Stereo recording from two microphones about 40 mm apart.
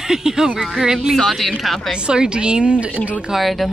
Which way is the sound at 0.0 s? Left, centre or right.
Centre.